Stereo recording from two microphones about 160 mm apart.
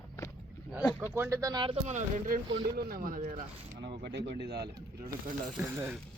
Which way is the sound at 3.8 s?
90° right.